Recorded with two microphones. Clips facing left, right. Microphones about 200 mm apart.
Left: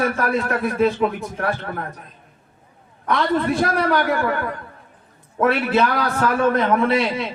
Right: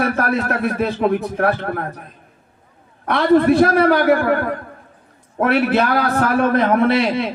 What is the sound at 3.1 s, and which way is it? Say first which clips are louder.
A man's voice: right 7 dB; 60° right (ahead or behind).